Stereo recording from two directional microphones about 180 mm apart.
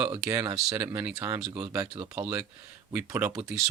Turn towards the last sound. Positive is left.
turn(degrees=-10)  # may be behind; listen again after turning